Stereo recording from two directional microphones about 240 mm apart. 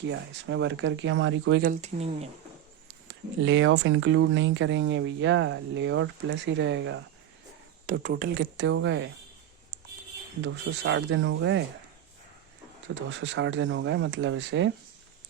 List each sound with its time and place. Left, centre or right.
0.0 s speech: right
1.6 s speech: right
3.4 s speech: right
7.9 s speech: right
10.4 s speech: right
12.9 s speech: right